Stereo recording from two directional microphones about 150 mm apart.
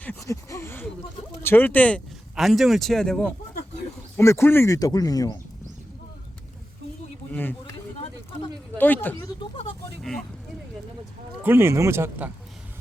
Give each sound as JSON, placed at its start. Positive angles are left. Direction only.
{"t": 0.0, "sound": "a sound", "side_deg": 15}
{"t": 1.4, "sound": "speech", "side_deg": 15}
{"t": 2.3, "sound": "speech", "side_deg": 0}
{"t": 4.2, "sound": "speech", "side_deg": 15}
{"t": 8.8, "sound": "speech", "side_deg": 10}
{"t": 11.4, "sound": "speech", "side_deg": -15}